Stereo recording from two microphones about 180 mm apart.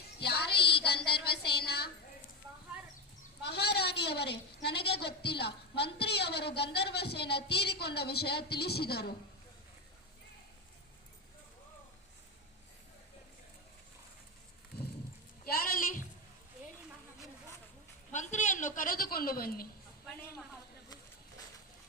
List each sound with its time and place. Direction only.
0.2 s child singing: 65° left (ahead or behind)
0.6 s child singing: 30° left (ahead or behind)
1.0 s a woman's voice: 65° left (ahead or behind)
3.4 s a woman's voice: 65° left (ahead or behind)
15.4 s a sound: 50° left (ahead or behind)
18.1 s a woman's voice: 40° left (ahead or behind)